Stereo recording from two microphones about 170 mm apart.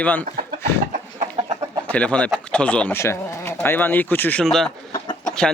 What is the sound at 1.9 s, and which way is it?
Speech, 5° left (ahead or behind).